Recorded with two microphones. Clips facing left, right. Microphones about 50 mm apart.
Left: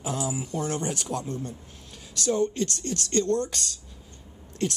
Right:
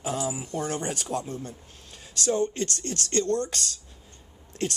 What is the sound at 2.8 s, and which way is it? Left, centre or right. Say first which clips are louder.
Speech: left 1 dB; right.